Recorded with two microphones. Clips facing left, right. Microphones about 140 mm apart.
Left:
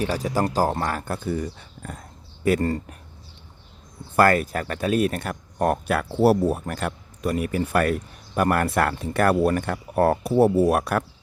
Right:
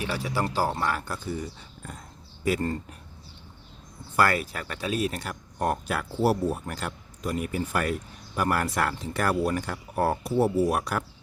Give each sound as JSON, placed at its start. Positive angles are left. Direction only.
{"t": 0.0, "sound": "speech", "side_deg": 40}
{"t": 4.2, "sound": "speech", "side_deg": 50}